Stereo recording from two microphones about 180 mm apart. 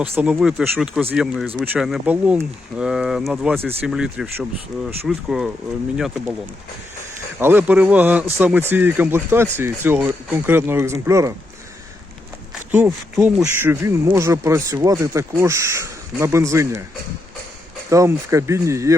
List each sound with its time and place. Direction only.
0.2 s speech: 5° right (ahead or behind)
3.6 s speech: 10° right (ahead or behind)
7.3 s speech: 10° right (ahead or behind)
12.7 s speech: 10° right (ahead or behind)
17.8 s speech: 15° right (ahead or behind)